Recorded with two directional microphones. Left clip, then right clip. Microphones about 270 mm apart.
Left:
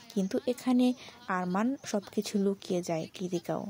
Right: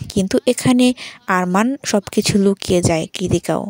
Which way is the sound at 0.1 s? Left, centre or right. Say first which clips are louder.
Right 15 dB; right.